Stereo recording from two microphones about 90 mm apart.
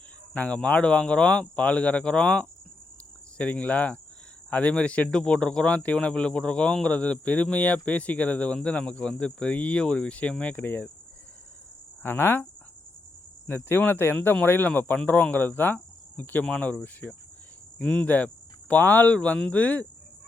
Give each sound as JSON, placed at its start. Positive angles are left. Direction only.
{"t": 0.3, "sound": "speech", "side_deg": 15}
{"t": 12.0, "sound": "cricket", "side_deg": 25}
{"t": 13.5, "sound": "cricket", "side_deg": 20}
{"t": 17.7, "sound": "speech", "side_deg": 15}